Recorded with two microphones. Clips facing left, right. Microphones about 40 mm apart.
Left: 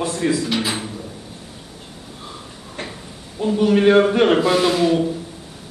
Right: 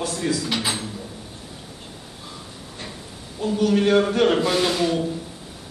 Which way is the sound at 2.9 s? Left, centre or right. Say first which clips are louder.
Left 2 dB; centre.